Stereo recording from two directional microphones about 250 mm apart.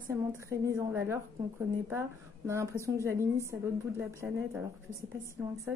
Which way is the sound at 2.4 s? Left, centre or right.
Centre.